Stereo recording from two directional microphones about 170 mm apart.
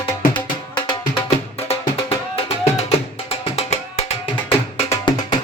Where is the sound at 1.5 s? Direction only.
35° left (ahead or behind).